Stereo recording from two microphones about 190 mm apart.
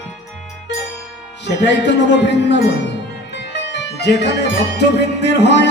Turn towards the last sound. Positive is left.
turn(degrees=65)  # may be behind; listen again after turning